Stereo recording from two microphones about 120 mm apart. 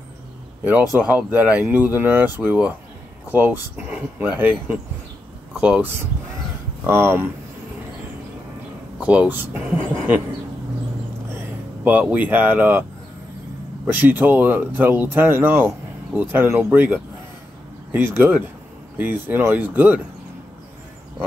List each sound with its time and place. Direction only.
0.9 s speech: 15° right (ahead or behind)
6.9 s speech: 20° right (ahead or behind)
9.0 s speech: 10° right (ahead or behind)
11.2 s vehicle: 15° right (ahead or behind)
13.8 s speech: 15° right (ahead or behind)